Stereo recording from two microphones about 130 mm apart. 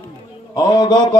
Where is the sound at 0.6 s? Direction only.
35° left (ahead or behind).